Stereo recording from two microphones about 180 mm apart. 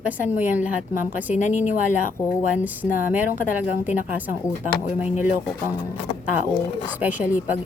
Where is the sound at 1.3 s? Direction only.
40° left (ahead or behind).